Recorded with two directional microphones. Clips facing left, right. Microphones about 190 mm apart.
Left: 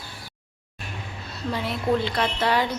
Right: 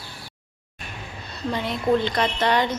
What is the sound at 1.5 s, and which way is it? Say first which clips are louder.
Speech: right 2 dB; 5° left (ahead or behind).